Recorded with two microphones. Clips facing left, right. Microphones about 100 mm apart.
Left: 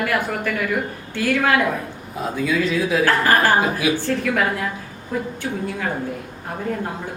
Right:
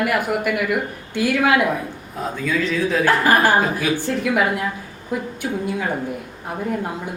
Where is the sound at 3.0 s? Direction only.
15° right (ahead or behind).